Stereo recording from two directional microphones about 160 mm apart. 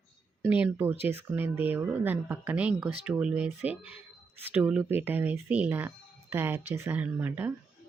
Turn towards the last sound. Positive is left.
turn(degrees=-10)  # may be behind; listen again after turning